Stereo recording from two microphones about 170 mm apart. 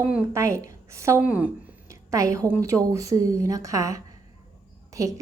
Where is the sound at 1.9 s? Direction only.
20° right (ahead or behind).